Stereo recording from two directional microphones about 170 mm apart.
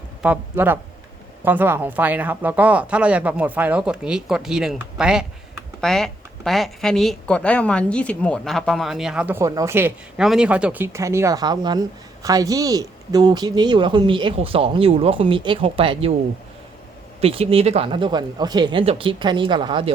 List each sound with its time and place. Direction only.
0.2 s speech: 10° right (ahead or behind); by 16.1 s 30° right (ahead or behind)
17.2 s speech: 35° right (ahead or behind)